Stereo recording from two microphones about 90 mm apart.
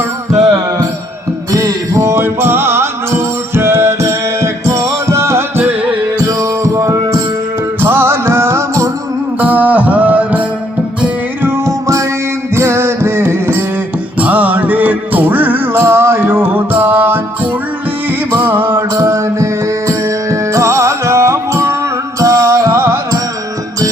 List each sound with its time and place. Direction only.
1.5 s music: 40° right (ahead or behind)
7.8 s music: 25° right (ahead or behind)
9.4 s music: 20° right (ahead or behind)
11.4 s music: 30° right (ahead or behind)